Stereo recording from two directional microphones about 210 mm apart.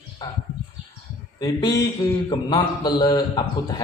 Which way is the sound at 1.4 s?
20° left (ahead or behind).